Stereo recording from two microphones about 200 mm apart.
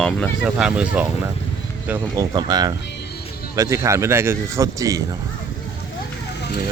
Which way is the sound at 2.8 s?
60° left (ahead or behind).